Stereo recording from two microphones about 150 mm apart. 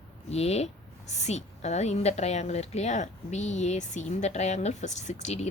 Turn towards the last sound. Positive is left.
turn(degrees=50)  # may be behind; listen again after turning